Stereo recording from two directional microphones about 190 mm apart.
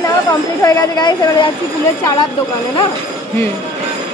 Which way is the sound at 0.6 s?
20° left (ahead or behind).